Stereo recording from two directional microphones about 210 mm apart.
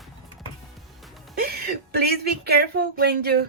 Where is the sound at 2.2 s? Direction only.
50° right (ahead or behind).